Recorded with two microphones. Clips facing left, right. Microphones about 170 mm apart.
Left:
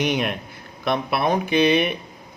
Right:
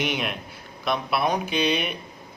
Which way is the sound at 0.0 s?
50° left (ahead or behind).